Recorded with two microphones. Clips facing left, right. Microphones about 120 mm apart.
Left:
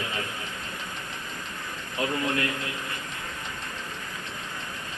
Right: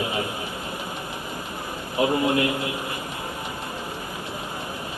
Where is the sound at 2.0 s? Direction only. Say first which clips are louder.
Right 7 dB; 20° right (ahead or behind).